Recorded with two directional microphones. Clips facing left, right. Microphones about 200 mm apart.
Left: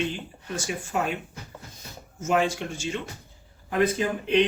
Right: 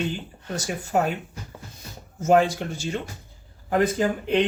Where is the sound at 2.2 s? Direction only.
35° right (ahead or behind).